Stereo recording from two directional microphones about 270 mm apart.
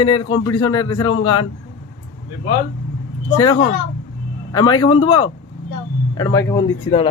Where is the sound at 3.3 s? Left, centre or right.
Centre.